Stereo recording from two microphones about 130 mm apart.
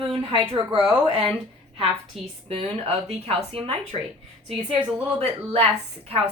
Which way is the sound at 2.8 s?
45° right (ahead or behind).